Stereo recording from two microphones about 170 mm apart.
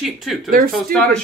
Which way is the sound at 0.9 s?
60° right (ahead or behind).